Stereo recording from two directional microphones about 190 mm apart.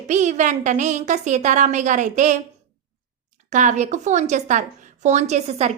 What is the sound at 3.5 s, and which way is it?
A woman's voice, 40° right (ahead or behind).